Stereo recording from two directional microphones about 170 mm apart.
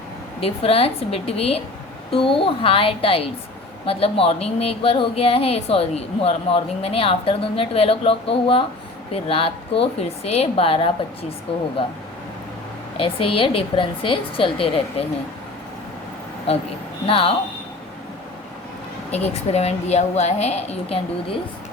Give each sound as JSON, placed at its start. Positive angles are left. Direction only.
{"t": 0.3, "sound": "speech", "side_deg": 35}
{"t": 13.0, "sound": "speech", "side_deg": 30}
{"t": 17.1, "sound": "speech", "side_deg": 35}
{"t": 19.1, "sound": "speech", "side_deg": 40}